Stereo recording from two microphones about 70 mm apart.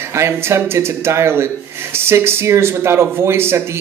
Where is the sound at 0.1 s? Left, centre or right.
Right.